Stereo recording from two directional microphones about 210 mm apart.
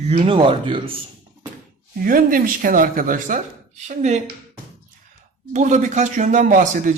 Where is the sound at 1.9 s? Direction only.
40° right (ahead or behind).